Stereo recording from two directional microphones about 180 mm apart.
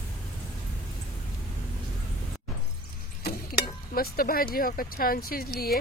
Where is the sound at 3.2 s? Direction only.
55° left (ahead or behind).